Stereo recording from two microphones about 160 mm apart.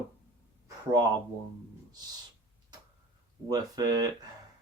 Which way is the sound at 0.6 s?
25° right (ahead or behind).